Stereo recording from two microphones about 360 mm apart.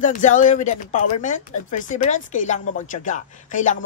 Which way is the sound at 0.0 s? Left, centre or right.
Left.